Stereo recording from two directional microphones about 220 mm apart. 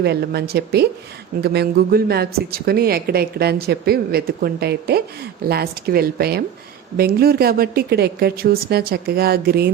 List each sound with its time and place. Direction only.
0.0 s a woman's voice: 50° right (ahead or behind)